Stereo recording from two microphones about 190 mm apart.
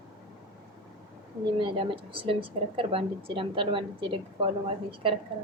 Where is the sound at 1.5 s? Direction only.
25° right (ahead or behind).